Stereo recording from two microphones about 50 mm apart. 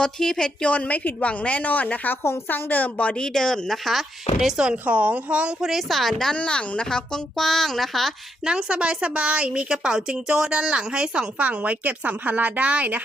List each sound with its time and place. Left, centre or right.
0.0 s speech: centre
0.7 s a woman's voice: left
3.2 s speech: centre
4.6 s speech: right
5.5 s speech: centre
6.3 s speech: left; by 8.1 s centre
8.4 s speech: centre